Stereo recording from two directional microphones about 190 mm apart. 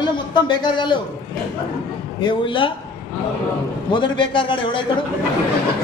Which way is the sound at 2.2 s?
25° left (ahead or behind).